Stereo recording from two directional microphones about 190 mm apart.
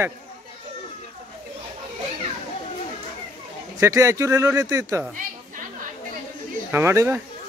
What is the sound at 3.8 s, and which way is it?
Speech, 15° right (ahead or behind).